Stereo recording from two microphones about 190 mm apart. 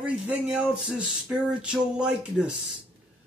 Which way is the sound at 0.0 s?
5° right (ahead or behind).